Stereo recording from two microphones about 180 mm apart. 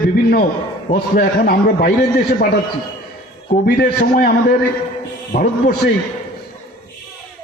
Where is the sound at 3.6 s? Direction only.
55° left (ahead or behind).